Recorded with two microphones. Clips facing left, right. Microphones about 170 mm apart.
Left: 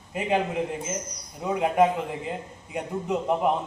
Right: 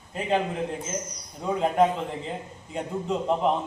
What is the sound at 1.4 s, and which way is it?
A man's voice, 10° left (ahead or behind).